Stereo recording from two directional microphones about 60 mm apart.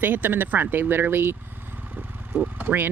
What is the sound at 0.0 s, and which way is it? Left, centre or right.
Speech, right.